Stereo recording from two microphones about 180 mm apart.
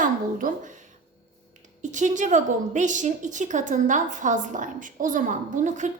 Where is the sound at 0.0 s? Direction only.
50° right (ahead or behind).